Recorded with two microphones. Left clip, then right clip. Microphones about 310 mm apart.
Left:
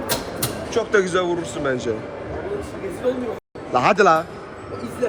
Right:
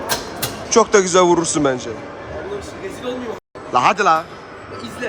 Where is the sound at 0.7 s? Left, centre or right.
Centre.